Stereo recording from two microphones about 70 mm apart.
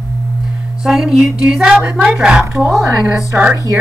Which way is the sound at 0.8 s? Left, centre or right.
Centre.